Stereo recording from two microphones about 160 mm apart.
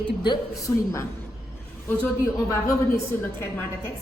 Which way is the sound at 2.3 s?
20° left (ahead or behind).